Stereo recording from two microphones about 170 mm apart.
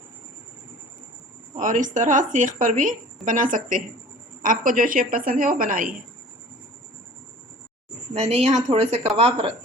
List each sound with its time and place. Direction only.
1.5 s a woman's voice: 50° right (ahead or behind)
8.1 s speech: 35° right (ahead or behind)